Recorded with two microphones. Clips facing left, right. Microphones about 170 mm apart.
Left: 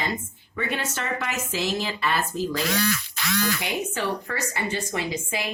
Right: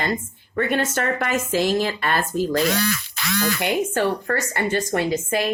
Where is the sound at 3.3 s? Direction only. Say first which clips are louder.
Right 5 dB; 60° right (ahead or behind).